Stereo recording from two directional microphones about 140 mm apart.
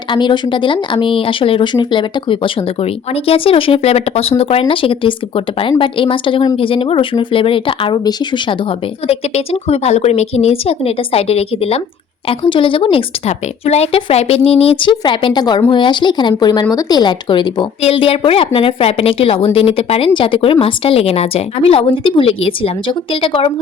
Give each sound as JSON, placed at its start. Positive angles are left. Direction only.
{"t": 0.1, "sound": "speech", "side_deg": 35}
{"t": 9.0, "sound": "speech", "side_deg": 45}